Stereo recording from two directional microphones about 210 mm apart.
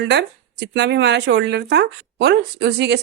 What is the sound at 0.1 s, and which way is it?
Speech, 55° right (ahead or behind).